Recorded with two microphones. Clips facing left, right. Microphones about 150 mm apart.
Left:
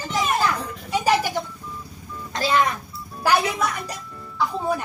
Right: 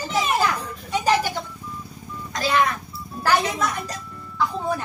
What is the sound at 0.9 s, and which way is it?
Music, 10° left (ahead or behind).